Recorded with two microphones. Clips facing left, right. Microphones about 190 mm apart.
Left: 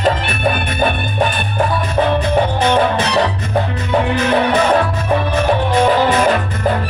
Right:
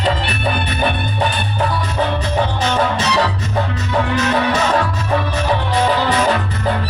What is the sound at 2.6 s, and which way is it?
Music, 60° left (ahead or behind).